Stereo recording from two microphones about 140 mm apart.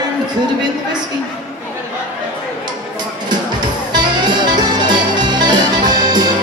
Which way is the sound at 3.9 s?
30° right (ahead or behind).